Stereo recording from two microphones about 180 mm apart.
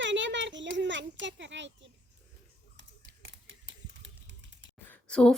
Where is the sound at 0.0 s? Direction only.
90° right.